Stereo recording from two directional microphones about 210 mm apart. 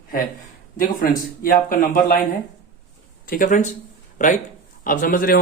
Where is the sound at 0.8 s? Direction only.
40° left (ahead or behind).